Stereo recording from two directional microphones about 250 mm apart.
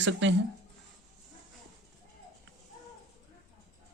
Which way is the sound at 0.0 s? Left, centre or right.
Right.